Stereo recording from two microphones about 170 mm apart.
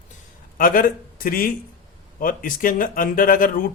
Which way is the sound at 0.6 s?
55° left (ahead or behind).